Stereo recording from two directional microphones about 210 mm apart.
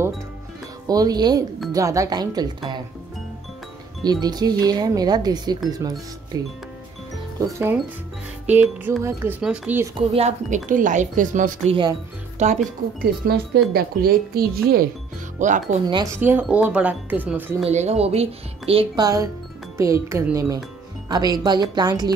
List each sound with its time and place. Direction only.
0.8 s speech: 20° right (ahead or behind)
4.0 s speech: 20° right (ahead or behind)
9.9 s speech: 30° right (ahead or behind)
11.7 s speech: 20° right (ahead or behind)
12.4 s speech: 35° right (ahead or behind)
13.2 s speech: 45° right (ahead or behind)
15.9 s speech: 15° right (ahead or behind)
17.6 s speech: 30° right (ahead or behind)
19.8 s speech: 15° right (ahead or behind)